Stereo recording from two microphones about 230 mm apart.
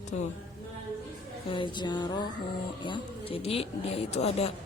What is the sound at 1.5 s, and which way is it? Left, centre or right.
Speech, left.